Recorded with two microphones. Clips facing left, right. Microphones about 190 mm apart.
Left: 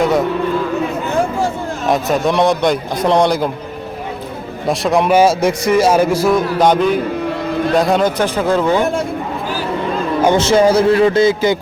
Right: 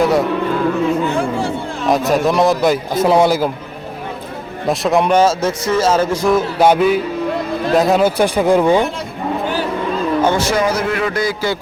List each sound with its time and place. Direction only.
1.9 s a man's voice: centre (ahead or behind)
4.7 s a man's voice: centre (ahead or behind)
6.3 s a man's voice: 5° right (ahead or behind)
10.2 s a man's voice: 20° left (ahead or behind)